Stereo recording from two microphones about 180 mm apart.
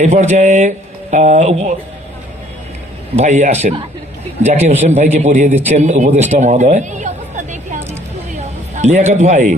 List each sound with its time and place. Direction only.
0.0 s a man's voice: 40° right (ahead or behind)
3.2 s a man's voice: 40° right (ahead or behind)